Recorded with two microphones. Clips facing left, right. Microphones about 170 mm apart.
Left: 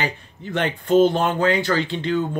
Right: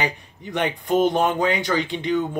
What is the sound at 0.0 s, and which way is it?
Speech, 15° right (ahead or behind).